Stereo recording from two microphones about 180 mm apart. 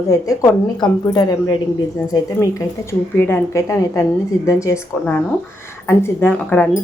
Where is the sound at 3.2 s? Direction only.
15° left (ahead or behind).